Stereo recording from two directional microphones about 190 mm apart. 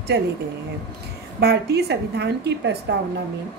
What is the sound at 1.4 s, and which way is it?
A woman's voice, 60° right (ahead or behind).